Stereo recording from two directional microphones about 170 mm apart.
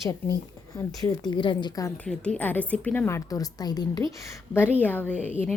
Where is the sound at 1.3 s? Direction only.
30° left (ahead or behind).